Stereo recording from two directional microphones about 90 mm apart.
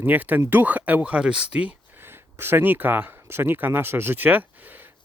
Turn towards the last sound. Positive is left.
turn(degrees=-20)  # may be behind; listen again after turning